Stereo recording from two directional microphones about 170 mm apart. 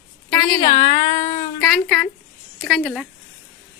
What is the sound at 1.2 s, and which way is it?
Child singing, 45° left (ahead or behind).